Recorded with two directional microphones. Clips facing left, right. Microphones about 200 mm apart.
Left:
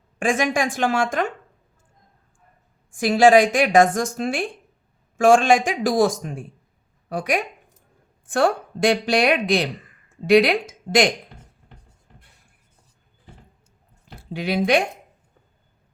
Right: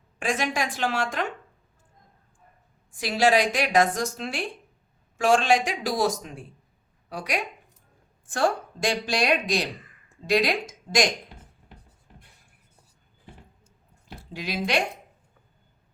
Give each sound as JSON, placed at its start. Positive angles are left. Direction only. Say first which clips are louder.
{"t": 0.2, "sound": "a woman's voice", "louder": "left 6 dB", "side_deg": 50}
{"t": 2.9, "sound": "a woman's voice", "louder": "left 8 dB", "side_deg": 50}
{"t": 14.3, "sound": "a woman's voice", "louder": "left 9 dB", "side_deg": 55}